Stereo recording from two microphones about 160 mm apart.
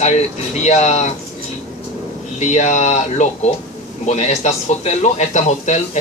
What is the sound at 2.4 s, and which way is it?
Speech, 45° left (ahead or behind).